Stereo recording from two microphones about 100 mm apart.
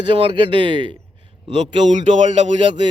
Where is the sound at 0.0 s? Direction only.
60° right (ahead or behind).